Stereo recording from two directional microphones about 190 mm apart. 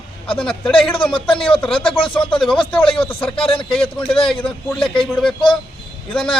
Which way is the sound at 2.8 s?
30° left (ahead or behind).